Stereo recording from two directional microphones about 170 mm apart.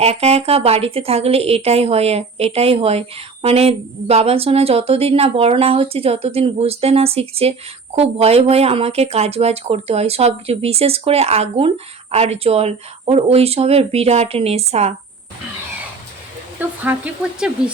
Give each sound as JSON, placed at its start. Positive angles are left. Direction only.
{"t": 0.0, "sound": "a woman's voice", "side_deg": -35}
{"t": 16.6, "sound": "speech", "side_deg": -10}